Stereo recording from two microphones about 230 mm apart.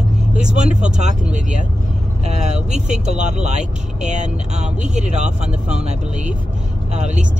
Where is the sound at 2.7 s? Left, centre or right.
Right.